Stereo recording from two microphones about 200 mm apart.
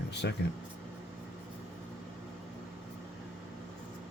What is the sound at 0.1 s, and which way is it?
Air conditioning, 55° left (ahead or behind).